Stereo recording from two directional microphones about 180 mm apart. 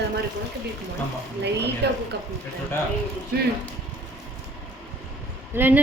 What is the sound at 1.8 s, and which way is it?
Speech, 70° right (ahead or behind).